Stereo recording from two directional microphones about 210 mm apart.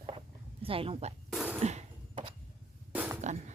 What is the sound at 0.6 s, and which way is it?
Speech, 25° right (ahead or behind).